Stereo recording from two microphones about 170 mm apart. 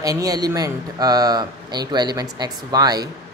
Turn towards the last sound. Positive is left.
turn(degrees=-25)  # may be behind; listen again after turning